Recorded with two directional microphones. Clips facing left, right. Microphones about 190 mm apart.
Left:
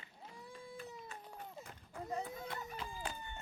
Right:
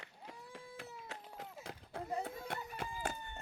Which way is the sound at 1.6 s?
80° right.